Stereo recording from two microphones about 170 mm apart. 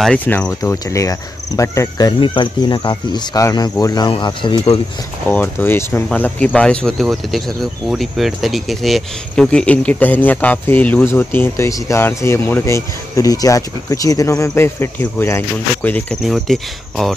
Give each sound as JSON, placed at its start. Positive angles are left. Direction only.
{"t": 0.0, "sound": "speech", "side_deg": 5}
{"t": 5.3, "sound": "speech", "side_deg": 10}